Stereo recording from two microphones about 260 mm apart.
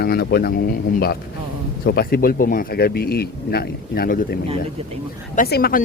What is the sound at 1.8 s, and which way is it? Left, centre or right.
Speech, left.